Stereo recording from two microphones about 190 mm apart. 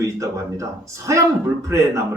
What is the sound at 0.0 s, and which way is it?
Speech, 15° right (ahead or behind).